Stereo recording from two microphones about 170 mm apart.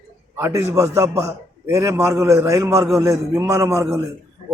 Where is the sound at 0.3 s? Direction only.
15° right (ahead or behind).